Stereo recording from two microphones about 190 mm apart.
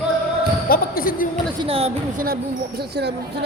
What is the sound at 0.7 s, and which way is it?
Speech, 50° left (ahead or behind).